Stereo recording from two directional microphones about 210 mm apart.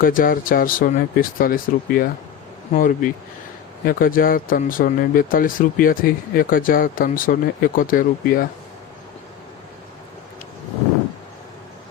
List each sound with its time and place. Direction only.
0.0 s speech: 40° left (ahead or behind)